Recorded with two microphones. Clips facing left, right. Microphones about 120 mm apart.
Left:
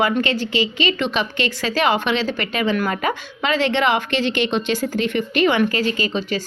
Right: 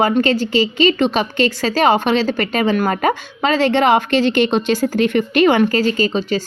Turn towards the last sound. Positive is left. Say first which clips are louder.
# right 5 dB
turn(degrees=-35)  # may be behind; listen again after turning